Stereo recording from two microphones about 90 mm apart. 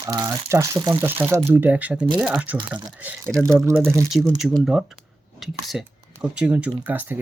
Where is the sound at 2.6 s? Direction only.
55° right (ahead or behind).